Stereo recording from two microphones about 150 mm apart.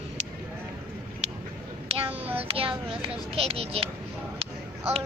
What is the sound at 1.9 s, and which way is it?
Child singing, 40° right (ahead or behind).